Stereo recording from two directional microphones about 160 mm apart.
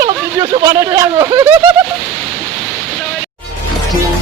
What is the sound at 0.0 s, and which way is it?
Speech, 25° right (ahead or behind).